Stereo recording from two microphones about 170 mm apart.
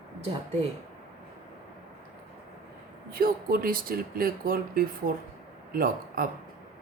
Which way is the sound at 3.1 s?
60° right (ahead or behind).